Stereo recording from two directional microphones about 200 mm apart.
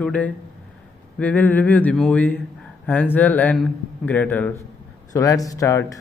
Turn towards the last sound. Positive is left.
turn(degrees=15)  # may be behind; listen again after turning